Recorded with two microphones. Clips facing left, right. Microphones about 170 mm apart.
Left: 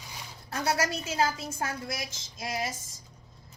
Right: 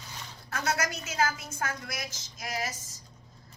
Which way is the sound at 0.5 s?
30° left (ahead or behind).